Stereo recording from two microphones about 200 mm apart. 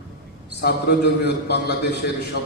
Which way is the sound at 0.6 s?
55° left (ahead or behind).